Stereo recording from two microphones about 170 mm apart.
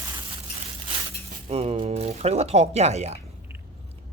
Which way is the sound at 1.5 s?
35° right (ahead or behind).